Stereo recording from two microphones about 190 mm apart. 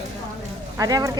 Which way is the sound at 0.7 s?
20° right (ahead or behind).